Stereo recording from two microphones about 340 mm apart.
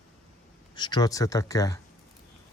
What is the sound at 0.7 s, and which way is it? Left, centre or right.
Speech, centre.